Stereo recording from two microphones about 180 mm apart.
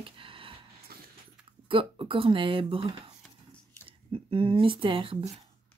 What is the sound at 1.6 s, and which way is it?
Speech, 30° right (ahead or behind).